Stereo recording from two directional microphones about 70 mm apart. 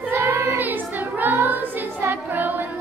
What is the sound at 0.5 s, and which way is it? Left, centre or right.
Music, right.